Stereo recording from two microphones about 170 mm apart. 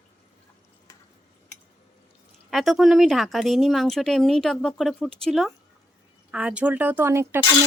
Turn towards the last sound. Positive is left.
turn(degrees=-15)  # may be behind; listen again after turning